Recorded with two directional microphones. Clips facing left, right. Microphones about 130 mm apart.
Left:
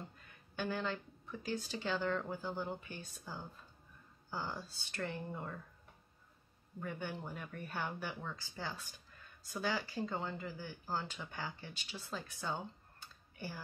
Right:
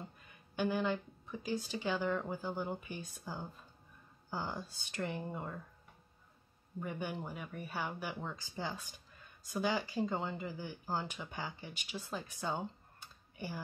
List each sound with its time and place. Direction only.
0.3 s speech: 15° right (ahead or behind)
6.8 s speech: 15° right (ahead or behind)